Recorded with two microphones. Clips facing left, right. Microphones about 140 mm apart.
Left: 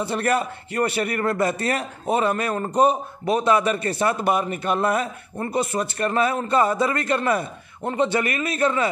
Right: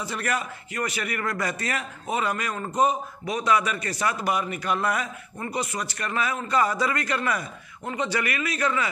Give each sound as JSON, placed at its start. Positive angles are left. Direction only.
{"t": 0.0, "sound": "a man's voice", "side_deg": 30}